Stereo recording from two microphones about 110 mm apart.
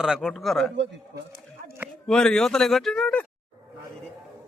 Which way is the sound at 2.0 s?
5° left (ahead or behind).